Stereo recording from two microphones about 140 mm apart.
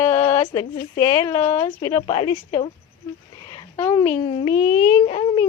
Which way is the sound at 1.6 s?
30° left (ahead or behind).